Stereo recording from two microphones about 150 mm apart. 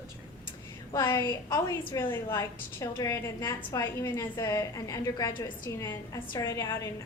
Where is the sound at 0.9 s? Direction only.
30° left (ahead or behind).